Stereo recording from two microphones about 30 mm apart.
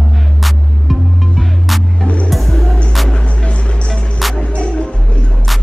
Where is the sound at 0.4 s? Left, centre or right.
Centre.